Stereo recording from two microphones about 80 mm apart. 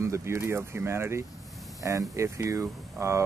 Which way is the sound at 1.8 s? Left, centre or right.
Right.